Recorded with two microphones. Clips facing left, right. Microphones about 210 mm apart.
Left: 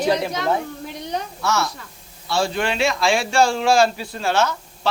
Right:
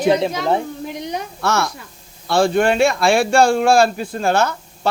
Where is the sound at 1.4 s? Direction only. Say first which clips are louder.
Right 4 dB; 55° right (ahead or behind).